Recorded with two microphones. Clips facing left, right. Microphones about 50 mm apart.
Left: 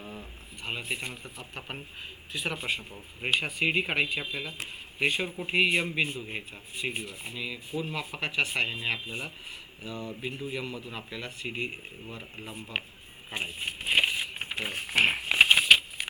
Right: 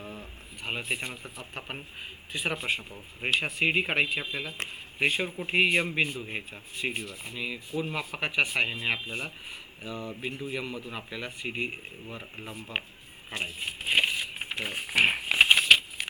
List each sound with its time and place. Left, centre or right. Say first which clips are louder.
0.0 s a sound: right 1 dB; centre
0.7 s speech: right 2 dB; centre
1.0 s speech: right 1 dB; centre
3.6 s speech: right 3 dB; centre
7.0 s speech: even; centre
7.3 s speech: right 2 dB; centre
13.4 s speech: right 1 dB; centre
14.5 s a sound: even; centre